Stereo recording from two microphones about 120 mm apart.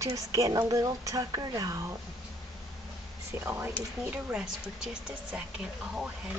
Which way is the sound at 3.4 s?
20° right (ahead or behind).